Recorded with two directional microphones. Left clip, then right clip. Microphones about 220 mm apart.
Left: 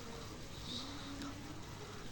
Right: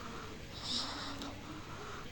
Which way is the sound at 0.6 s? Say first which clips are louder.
Right 8 dB; 50° right (ahead or behind).